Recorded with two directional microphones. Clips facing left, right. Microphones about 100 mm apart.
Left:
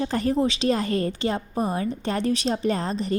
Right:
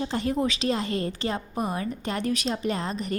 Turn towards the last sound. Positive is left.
turn(degrees=35)  # may be behind; listen again after turning